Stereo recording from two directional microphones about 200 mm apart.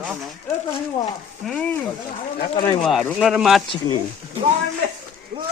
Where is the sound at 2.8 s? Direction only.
Centre (ahead or behind).